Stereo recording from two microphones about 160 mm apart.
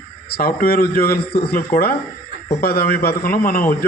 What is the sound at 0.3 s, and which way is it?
A man's voice, 75° left (ahead or behind).